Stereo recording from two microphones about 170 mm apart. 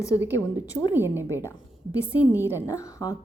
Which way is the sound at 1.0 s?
15° right (ahead or behind).